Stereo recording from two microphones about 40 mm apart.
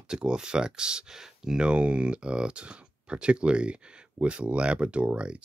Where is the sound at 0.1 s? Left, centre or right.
Right.